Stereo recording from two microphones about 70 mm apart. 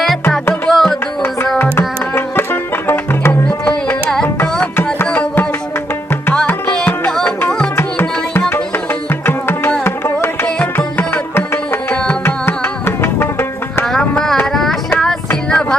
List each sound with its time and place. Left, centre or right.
0.0 s music: centre
2.1 s music: left
7.8 s music: left
11.3 s music: left
13.8 s a sound: centre
14.9 s music: centre